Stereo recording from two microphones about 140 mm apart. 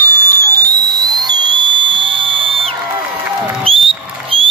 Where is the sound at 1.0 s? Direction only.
30° right (ahead or behind).